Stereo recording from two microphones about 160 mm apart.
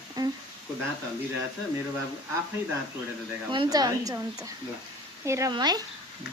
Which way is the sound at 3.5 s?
25° right (ahead or behind).